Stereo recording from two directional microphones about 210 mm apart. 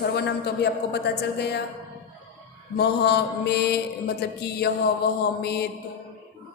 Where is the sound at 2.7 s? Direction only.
50° left (ahead or behind).